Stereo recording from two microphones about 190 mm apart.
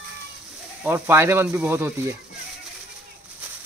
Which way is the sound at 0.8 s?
10° right (ahead or behind).